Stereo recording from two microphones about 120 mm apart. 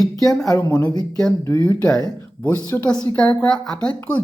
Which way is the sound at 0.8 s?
35° left (ahead or behind).